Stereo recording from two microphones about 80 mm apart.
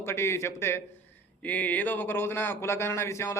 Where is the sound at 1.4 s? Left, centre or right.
Centre.